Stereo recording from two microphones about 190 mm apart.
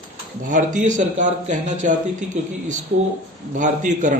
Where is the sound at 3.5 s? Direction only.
40° right (ahead or behind).